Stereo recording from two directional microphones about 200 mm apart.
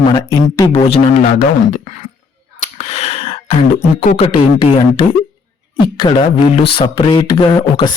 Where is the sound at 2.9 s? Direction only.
30° left (ahead or behind).